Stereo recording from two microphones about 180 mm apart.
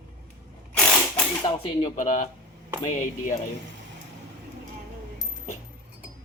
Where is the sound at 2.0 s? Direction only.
45° left (ahead or behind).